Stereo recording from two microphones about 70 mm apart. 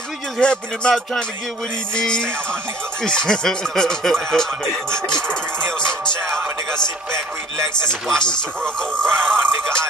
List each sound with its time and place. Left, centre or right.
0.4 s speech: centre
7.1 s speech: right
7.9 s speech: centre